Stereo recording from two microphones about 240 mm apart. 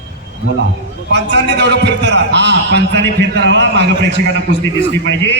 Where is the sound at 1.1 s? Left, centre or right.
Right.